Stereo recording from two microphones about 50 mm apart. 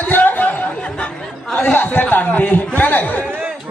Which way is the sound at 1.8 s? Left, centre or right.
Left.